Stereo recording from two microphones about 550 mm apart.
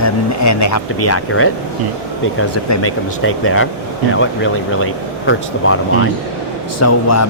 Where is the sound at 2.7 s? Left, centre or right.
Left.